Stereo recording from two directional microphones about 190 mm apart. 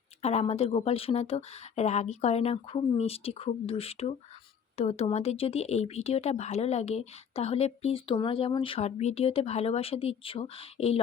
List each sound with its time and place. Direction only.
0.2 s speech: 35° left (ahead or behind)